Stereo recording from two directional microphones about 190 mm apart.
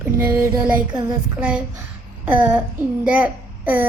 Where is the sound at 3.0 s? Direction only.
10° right (ahead or behind).